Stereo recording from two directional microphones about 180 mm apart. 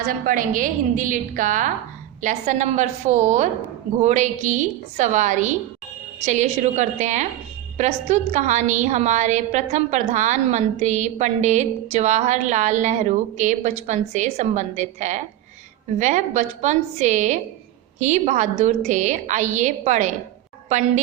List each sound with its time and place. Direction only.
0.1 s a woman's voice: 50° right (ahead or behind)